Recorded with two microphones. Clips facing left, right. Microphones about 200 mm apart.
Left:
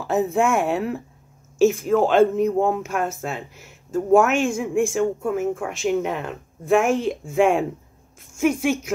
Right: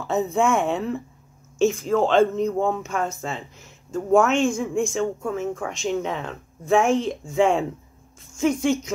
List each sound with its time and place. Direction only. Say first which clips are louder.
0.0 s speech: left 1 dB; 5° left (ahead or behind)